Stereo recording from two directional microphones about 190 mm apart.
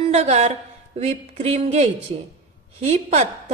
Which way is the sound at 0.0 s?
35° right (ahead or behind).